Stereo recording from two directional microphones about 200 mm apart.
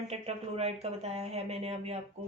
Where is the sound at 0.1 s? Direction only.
30° right (ahead or behind).